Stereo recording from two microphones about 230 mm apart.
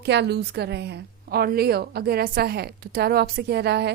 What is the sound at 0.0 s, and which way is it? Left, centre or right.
A woman's voice, right.